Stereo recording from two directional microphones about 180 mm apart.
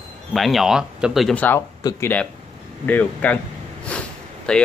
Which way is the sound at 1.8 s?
20° left (ahead or behind).